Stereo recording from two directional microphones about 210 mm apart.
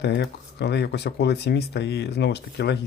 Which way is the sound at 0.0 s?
55° left (ahead or behind).